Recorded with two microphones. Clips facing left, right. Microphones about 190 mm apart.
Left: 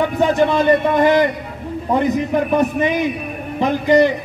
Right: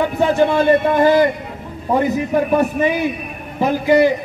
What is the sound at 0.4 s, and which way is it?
A man's voice, 10° right (ahead or behind).